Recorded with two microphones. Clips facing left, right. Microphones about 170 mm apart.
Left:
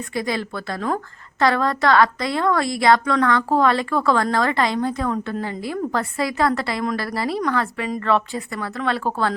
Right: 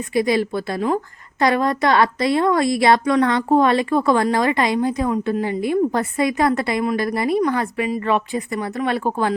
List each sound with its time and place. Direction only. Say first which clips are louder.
0.1 s a woman's voice: right 7 dB; 20° right (ahead or behind)